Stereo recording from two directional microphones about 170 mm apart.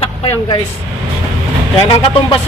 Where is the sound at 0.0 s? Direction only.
30° left (ahead or behind).